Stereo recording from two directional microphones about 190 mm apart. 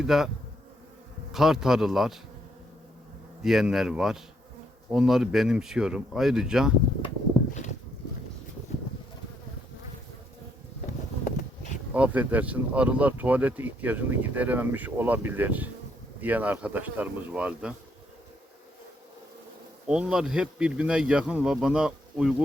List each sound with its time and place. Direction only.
0.0 s speech: centre (ahead or behind)
1.3 s speech: centre (ahead or behind)
3.4 s speech: centre (ahead or behind)
11.3 s a sound: 40° left (ahead or behind)
11.9 s speech: 5° right (ahead or behind)
19.9 s speech: 5° right (ahead or behind)